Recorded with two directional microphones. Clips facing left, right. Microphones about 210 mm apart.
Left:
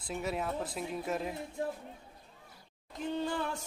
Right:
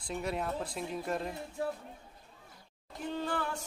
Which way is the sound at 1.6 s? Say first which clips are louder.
Right 1 dB; 20° left (ahead or behind).